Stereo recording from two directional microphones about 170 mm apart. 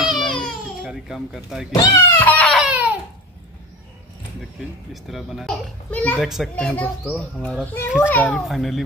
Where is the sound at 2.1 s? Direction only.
10° left (ahead or behind).